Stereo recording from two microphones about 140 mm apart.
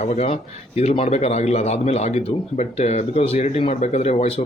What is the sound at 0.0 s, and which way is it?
A man's voice, 50° left (ahead or behind).